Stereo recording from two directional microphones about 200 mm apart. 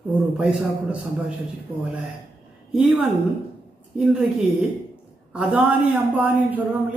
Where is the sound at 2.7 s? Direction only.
5° right (ahead or behind).